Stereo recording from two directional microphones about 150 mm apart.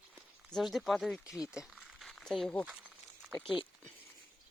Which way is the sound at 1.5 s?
5° right (ahead or behind).